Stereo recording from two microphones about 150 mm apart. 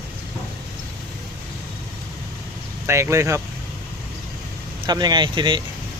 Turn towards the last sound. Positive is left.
turn(degrees=-30)  # may be behind; listen again after turning